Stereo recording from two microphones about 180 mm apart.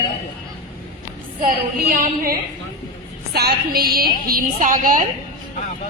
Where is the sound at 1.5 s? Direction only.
55° right (ahead or behind).